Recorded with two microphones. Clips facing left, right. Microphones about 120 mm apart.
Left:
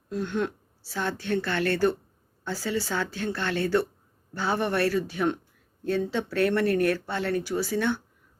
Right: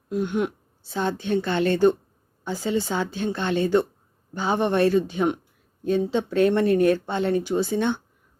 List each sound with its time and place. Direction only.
0.1 s speech: 15° right (ahead or behind)